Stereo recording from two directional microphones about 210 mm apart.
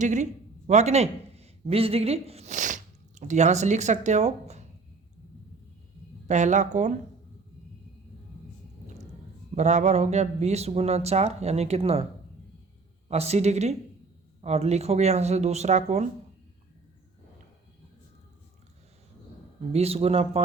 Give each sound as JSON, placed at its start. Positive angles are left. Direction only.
{"t": 0.0, "sound": "speech", "side_deg": -35}
{"t": 6.2, "sound": "speech", "side_deg": -35}
{"t": 9.6, "sound": "speech", "side_deg": -35}
{"t": 13.1, "sound": "speech", "side_deg": -30}
{"t": 19.7, "sound": "speech", "side_deg": -30}